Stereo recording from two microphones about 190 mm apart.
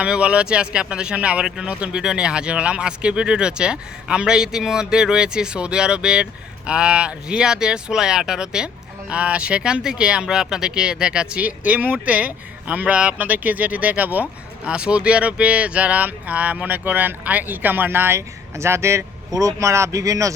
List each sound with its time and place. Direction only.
0.0 s speech: 5° right (ahead or behind)